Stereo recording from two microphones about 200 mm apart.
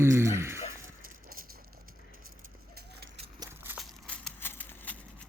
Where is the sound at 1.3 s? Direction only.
50° right (ahead or behind).